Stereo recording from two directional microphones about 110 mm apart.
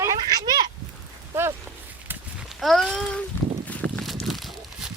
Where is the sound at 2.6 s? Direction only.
Centre (ahead or behind).